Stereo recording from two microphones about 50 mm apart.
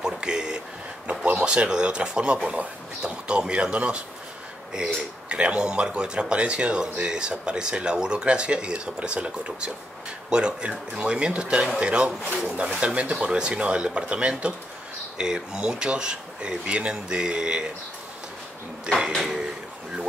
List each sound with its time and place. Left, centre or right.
0.0 s a sound: centre
1.2 s speech: right
18.9 s speech: centre